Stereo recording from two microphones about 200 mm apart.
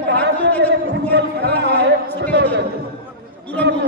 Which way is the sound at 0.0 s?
60° right (ahead or behind).